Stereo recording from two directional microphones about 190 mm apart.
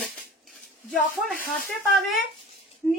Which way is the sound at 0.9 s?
5° left (ahead or behind).